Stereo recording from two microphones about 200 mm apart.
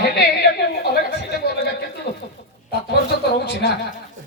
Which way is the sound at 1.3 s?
55° left (ahead or behind).